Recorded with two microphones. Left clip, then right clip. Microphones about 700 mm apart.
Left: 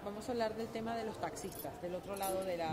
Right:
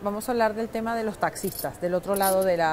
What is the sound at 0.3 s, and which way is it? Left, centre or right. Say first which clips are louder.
A woman's voice: right 13 dB; right.